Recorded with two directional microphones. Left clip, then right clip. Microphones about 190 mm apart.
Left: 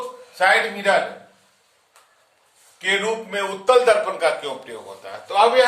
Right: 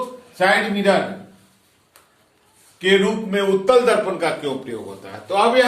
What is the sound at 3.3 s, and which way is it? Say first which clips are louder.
A man's voice: right 2 dB; 30° left (ahead or behind).